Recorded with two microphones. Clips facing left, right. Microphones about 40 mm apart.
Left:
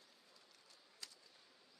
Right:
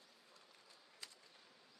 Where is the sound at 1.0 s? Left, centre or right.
Right.